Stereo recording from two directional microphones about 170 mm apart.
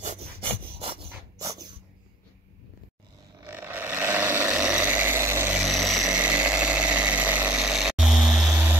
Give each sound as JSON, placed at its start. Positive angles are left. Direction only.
{"t": 0.0, "sound": "wood", "side_deg": -45}
{"t": 0.4, "sound": "rub", "side_deg": -35}
{"t": 3.4, "sound": "a sound", "side_deg": -10}
{"t": 5.6, "sound": "vehicle", "side_deg": 0}